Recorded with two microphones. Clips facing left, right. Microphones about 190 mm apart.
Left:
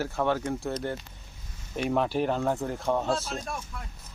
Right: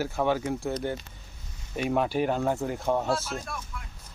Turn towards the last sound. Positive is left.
turn(degrees=20)  # may be behind; listen again after turning